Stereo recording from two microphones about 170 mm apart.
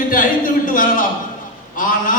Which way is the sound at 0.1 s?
55° left (ahead or behind).